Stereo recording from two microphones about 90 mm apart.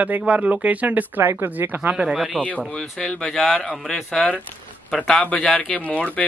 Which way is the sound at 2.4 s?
15° left (ahead or behind).